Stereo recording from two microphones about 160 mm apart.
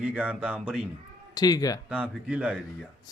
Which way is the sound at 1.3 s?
25° left (ahead or behind).